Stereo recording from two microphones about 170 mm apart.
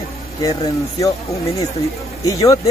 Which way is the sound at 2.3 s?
20° left (ahead or behind).